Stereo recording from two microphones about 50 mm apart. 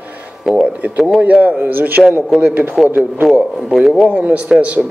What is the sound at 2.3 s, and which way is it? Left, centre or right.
Speech, right.